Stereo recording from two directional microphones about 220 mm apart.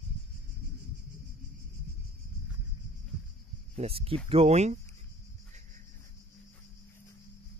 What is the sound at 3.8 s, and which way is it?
Speech, 25° right (ahead or behind).